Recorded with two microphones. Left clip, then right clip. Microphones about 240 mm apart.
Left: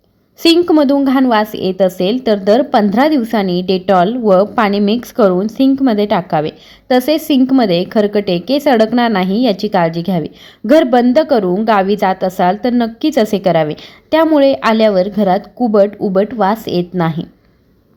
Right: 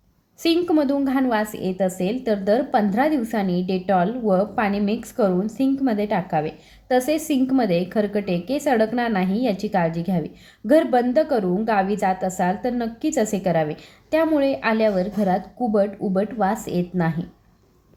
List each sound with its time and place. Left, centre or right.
0.4 s a woman's voice: left